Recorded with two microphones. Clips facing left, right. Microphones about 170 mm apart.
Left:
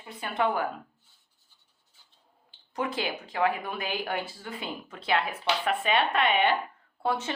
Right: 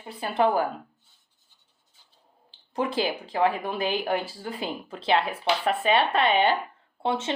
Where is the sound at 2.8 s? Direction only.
30° right (ahead or behind).